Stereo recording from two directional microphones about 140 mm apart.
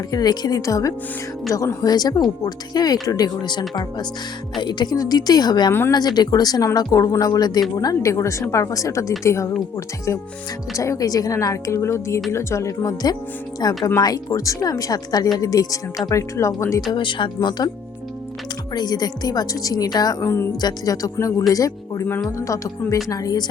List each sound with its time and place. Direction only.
0.1 s speech: 30° left (ahead or behind)
4.6 s speech: 30° left (ahead or behind)
16.9 s speech: 35° left (ahead or behind)
18.7 s speech: 30° left (ahead or behind)
20.2 s music: 15° left (ahead or behind)
20.6 s speech: 25° left (ahead or behind)
22.0 s speech: 15° left (ahead or behind)